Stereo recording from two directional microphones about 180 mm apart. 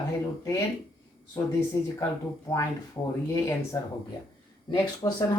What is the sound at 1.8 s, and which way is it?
Speech, 15° left (ahead or behind).